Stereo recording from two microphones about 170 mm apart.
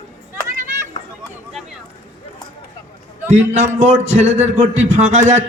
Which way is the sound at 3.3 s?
40° right (ahead or behind).